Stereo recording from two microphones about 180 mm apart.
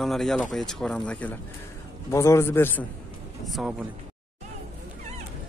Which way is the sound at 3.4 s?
Centre (ahead or behind).